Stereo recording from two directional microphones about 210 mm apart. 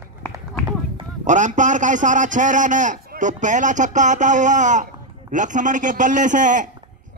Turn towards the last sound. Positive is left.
turn(degrees=-35)  # may be behind; listen again after turning